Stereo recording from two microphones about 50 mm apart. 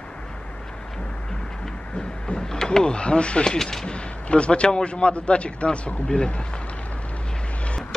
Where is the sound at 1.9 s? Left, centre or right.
Centre.